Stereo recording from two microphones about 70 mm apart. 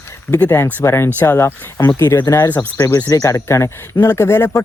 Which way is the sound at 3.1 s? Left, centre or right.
Left.